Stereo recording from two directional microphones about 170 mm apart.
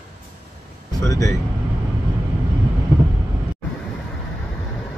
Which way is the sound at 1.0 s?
20° left (ahead or behind).